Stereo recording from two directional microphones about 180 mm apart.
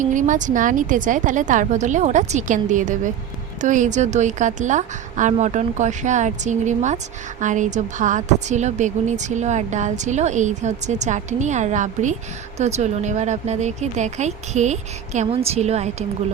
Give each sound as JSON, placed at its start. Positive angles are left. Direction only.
{"t": 0.0, "sound": "a woman's voice", "side_deg": -45}